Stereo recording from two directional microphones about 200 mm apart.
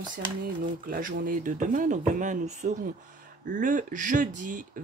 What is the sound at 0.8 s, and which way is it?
Speech, 45° right (ahead or behind).